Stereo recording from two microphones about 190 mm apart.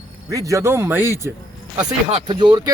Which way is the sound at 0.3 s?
15° right (ahead or behind).